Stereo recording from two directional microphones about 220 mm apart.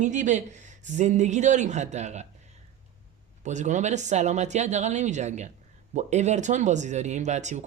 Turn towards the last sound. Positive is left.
turn(degrees=-30)  # may be behind; listen again after turning